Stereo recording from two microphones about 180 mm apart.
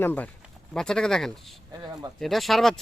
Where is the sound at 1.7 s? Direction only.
20° right (ahead or behind).